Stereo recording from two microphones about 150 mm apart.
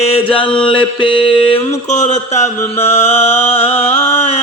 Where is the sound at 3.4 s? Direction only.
40° left (ahead or behind).